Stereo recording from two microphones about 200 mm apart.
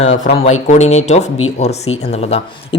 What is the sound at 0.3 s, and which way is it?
Speech, 35° left (ahead or behind).